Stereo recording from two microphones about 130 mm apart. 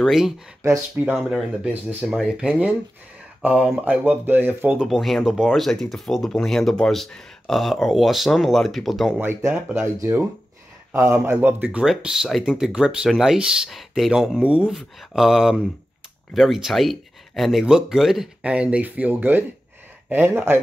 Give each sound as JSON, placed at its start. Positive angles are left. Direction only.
{"t": 0.0, "sound": "speech", "side_deg": 0}
{"t": 0.6, "sound": "speech", "side_deg": -15}
{"t": 1.1, "sound": "speech", "side_deg": 0}
{"t": 1.7, "sound": "speech", "side_deg": -15}
{"t": 4.8, "sound": "speech", "side_deg": 0}
{"t": 9.2, "sound": "speech", "side_deg": -15}
{"t": 10.9, "sound": "speech", "side_deg": -20}
{"t": 11.8, "sound": "speech", "side_deg": -5}